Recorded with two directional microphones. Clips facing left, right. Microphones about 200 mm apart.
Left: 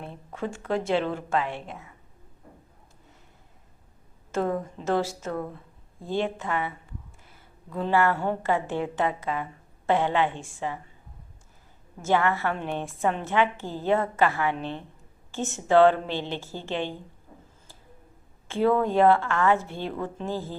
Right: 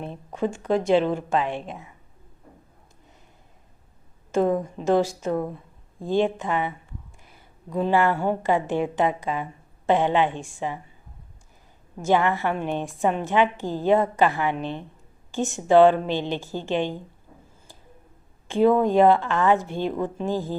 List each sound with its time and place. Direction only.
0.0 s a woman's voice: 20° right (ahead or behind)
4.3 s a woman's voice: 15° right (ahead or behind)
12.0 s a woman's voice: 15° right (ahead or behind)
18.4 s a woman's voice: 15° right (ahead or behind)